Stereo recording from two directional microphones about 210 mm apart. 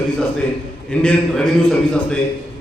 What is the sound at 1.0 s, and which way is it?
A man's voice, 5° left (ahead or behind).